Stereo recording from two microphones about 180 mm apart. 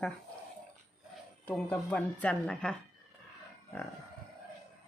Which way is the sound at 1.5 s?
10° left (ahead or behind).